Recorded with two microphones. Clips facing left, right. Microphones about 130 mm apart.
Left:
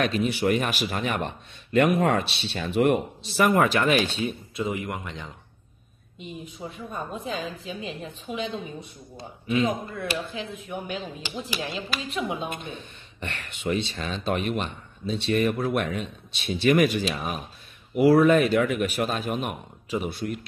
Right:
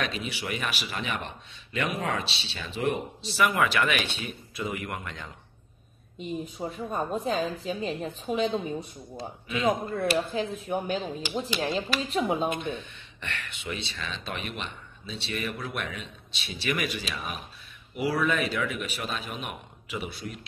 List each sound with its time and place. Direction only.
0.0 s a man's voice: 50° left (ahead or behind); by 5.3 s 20° left (ahead or behind)
6.1 s speech: 40° right (ahead or behind)
9.6 s speech: 35° right (ahead or behind)
12.7 s a man's voice: 40° left (ahead or behind)
17.9 s a man's voice: 50° left (ahead or behind)